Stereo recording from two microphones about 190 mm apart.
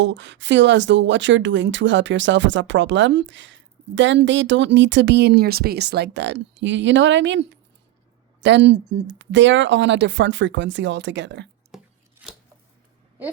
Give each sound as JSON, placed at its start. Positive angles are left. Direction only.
{"t": 0.0, "sound": "speech", "side_deg": -70}
{"t": 11.7, "sound": "chopping", "side_deg": 0}